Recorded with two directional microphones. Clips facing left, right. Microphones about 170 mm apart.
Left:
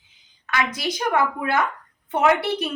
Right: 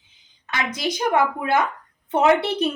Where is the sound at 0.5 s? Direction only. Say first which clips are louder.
Left 1 dB; 20° right (ahead or behind).